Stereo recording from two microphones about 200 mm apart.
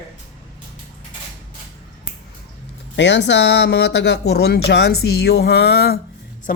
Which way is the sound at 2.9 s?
60° left (ahead or behind).